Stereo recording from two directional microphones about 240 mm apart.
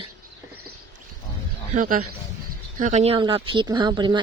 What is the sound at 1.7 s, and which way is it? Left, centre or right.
Speech, right.